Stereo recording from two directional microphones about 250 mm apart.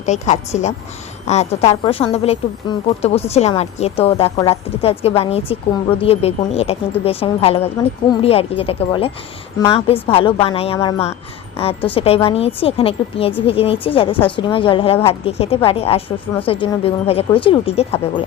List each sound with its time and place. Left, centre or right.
0.0 s speech: left